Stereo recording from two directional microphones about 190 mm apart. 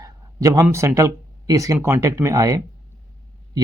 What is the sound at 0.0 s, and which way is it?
Speech, 20° right (ahead or behind).